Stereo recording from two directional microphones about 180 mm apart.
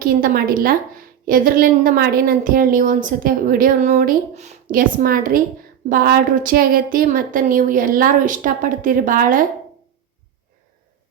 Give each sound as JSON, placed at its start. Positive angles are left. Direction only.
{"t": 0.0, "sound": "a woman's voice", "side_deg": -55}